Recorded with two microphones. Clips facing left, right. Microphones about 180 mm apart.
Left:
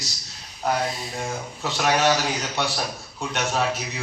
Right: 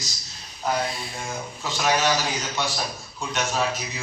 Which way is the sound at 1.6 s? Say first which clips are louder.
Left 2 dB; 65° left (ahead or behind).